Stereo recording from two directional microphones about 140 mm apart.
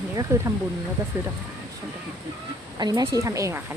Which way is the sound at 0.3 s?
20° right (ahead or behind).